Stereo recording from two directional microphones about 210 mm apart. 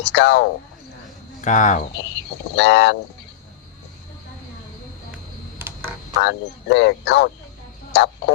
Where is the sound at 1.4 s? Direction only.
35° left (ahead or behind).